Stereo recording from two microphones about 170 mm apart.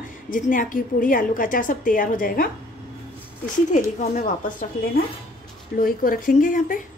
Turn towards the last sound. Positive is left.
turn(degrees=50)  # may be behind; listen again after turning